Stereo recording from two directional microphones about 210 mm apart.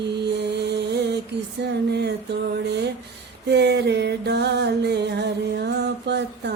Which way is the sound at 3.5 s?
55° right (ahead or behind).